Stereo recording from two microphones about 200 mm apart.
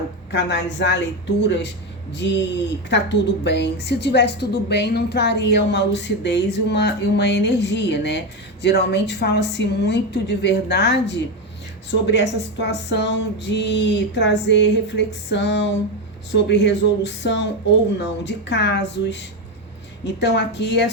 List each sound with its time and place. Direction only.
0.3 s a woman's voice: 60° left (ahead or behind)